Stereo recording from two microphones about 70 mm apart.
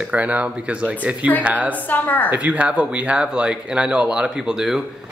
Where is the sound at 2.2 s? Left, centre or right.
Centre.